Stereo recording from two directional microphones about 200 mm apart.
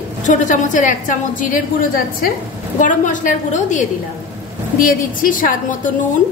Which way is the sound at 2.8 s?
40° left (ahead or behind).